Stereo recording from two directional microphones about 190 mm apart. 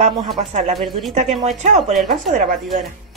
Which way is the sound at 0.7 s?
Centre (ahead or behind).